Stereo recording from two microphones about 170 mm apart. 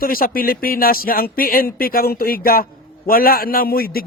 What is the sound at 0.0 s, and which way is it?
Speech, 60° left (ahead or behind).